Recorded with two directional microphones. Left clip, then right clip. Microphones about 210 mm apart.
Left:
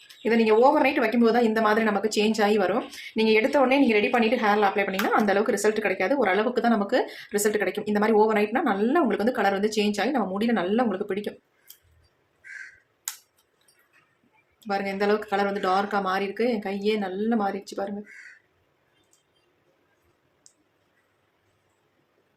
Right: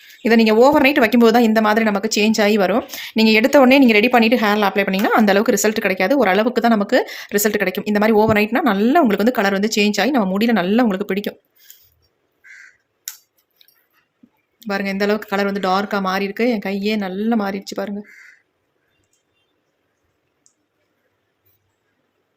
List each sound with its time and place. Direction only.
0.2 s speech: 50° right (ahead or behind)
14.6 s speech: 40° right (ahead or behind)